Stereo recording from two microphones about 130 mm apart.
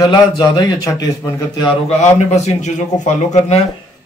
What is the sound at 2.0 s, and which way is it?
A man's voice, 60° left (ahead or behind).